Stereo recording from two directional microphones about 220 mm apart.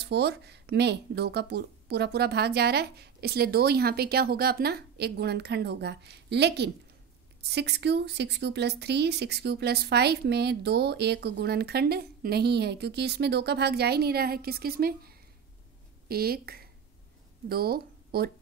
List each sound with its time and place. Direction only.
0.0 s speech: 50° right (ahead or behind)